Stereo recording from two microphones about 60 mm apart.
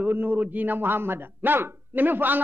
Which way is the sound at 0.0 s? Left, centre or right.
Right.